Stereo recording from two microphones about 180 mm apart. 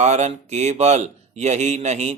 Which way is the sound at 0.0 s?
40° right (ahead or behind).